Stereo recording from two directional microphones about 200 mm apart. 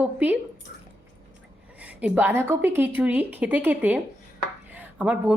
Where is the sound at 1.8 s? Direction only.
5° right (ahead or behind).